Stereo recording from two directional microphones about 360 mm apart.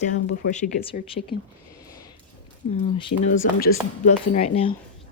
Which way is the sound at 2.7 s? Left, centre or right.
Centre.